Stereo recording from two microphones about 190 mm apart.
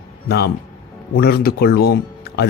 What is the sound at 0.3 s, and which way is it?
Speech, 60° left (ahead or behind).